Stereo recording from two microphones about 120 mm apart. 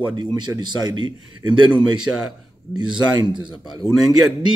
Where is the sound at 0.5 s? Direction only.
35° right (ahead or behind).